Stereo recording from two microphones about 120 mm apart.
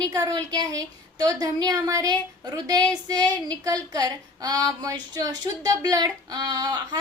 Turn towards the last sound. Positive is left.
turn(degrees=-35)  # may be behind; listen again after turning